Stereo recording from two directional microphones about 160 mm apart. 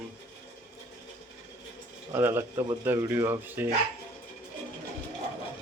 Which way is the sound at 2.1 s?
15° right (ahead or behind).